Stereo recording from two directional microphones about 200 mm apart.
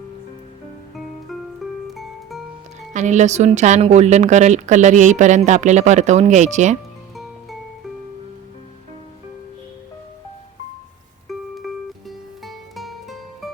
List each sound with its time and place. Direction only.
1.9 s music: centre (ahead or behind)
2.9 s a woman's voice: 35° right (ahead or behind)
11.3 s music: centre (ahead or behind)